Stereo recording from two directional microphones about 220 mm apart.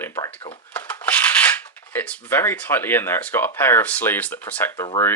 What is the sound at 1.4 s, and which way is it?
Speech, 10° left (ahead or behind).